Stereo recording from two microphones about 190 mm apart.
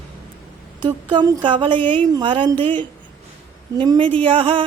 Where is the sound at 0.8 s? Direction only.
25° right (ahead or behind).